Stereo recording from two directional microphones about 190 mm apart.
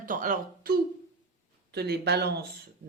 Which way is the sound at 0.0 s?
45° right (ahead or behind).